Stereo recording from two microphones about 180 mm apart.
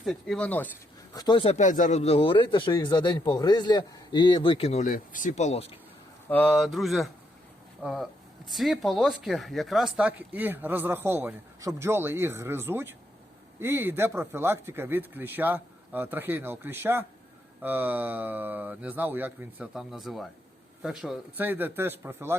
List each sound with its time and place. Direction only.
0.0 s speech: centre (ahead or behind)
1.1 s a man's voice: 25° left (ahead or behind)
1.5 s a man's voice: 45° left (ahead or behind)
6.2 s speech: 10° left (ahead or behind); by 22.4 s 10° right (ahead or behind)